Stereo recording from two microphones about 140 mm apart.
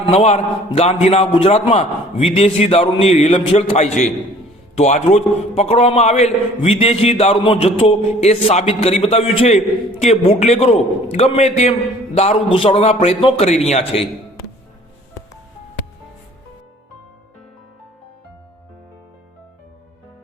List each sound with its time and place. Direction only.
0.0 s a man's voice: 50° left (ahead or behind)
3.1 s a man's voice: 55° left (ahead or behind)
12.5 s a man's voice: 40° left (ahead or behind)